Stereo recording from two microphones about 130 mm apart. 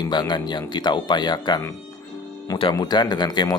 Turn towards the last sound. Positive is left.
turn(degrees=35)  # may be behind; listen again after turning